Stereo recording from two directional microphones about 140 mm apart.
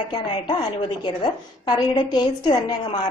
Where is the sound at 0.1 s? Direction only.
30° left (ahead or behind).